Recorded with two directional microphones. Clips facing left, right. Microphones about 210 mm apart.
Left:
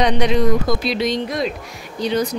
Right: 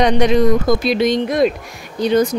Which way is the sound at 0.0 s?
50° right (ahead or behind).